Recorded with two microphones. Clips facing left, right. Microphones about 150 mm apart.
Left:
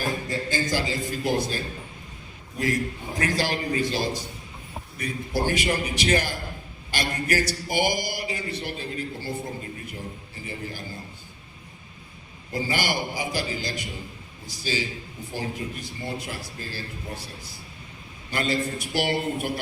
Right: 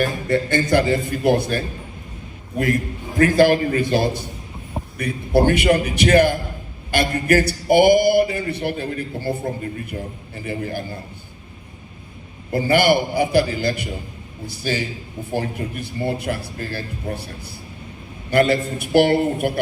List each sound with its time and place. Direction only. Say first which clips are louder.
0.0 s a man's voice: right 8 dB; 65° right (ahead or behind)
3.2 s a man's voice: right 12 dB; 50° right (ahead or behind)
10.4 s a man's voice: right 9 dB; 55° right (ahead or behind)
12.5 s a man's voice: right 11 dB; 60° right (ahead or behind)